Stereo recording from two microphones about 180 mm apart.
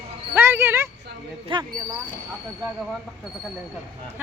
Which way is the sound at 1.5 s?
25° right (ahead or behind).